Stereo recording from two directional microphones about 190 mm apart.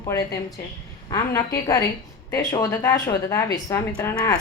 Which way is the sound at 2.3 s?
20° left (ahead or behind).